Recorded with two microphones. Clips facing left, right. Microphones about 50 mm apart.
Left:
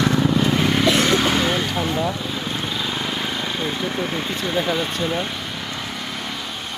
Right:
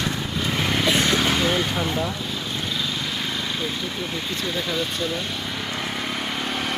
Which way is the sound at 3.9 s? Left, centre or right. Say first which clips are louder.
Left 4 dB; left.